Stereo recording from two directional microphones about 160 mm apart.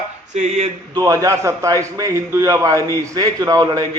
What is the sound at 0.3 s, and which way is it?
Speech, 45° right (ahead or behind).